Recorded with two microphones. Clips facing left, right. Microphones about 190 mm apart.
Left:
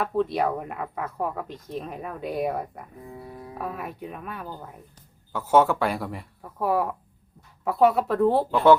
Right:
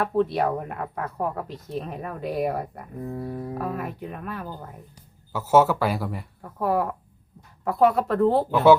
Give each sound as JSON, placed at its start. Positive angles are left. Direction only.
{"t": 0.0, "sound": "speech", "side_deg": 0}
{"t": 3.0, "sound": "speech", "side_deg": -50}
{"t": 3.6, "sound": "speech", "side_deg": 0}